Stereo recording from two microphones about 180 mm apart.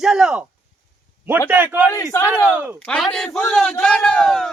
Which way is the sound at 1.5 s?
10° right (ahead or behind).